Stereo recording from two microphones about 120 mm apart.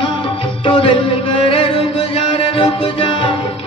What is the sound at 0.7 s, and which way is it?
Music, 45° left (ahead or behind).